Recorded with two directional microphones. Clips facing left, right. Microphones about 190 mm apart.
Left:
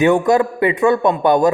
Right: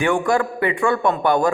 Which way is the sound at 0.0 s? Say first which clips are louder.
Left 5 dB; 20° left (ahead or behind).